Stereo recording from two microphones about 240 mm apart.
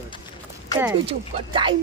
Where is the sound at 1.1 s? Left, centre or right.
Right.